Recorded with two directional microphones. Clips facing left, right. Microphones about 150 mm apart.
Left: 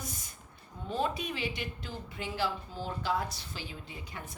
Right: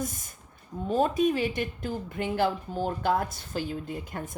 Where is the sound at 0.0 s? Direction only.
50° right (ahead or behind).